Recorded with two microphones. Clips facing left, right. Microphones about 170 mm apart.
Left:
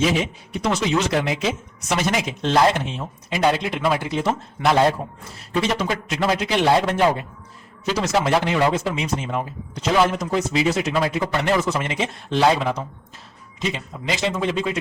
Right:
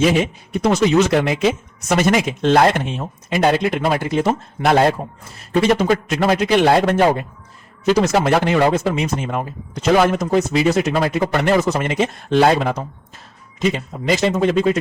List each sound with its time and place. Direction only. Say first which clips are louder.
0.0 s a man's voice: right 5 dB; 55° right (ahead or behind)